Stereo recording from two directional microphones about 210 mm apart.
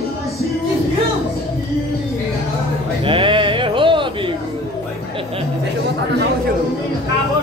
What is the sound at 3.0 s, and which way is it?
Sheep, 25° right (ahead or behind).